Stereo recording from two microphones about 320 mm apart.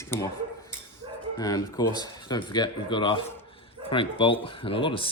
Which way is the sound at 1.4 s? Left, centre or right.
Centre.